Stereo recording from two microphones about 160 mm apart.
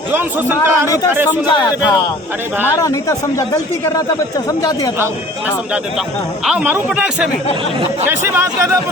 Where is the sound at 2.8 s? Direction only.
20° left (ahead or behind).